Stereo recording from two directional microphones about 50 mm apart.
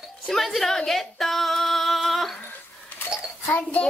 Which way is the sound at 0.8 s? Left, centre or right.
Centre.